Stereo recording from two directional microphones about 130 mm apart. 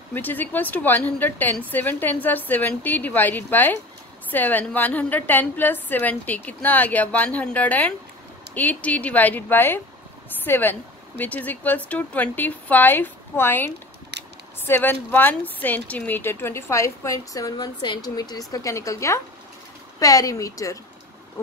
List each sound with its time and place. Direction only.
0.1 s a woman's voice: 15° left (ahead or behind)
14.7 s speech: 15° left (ahead or behind)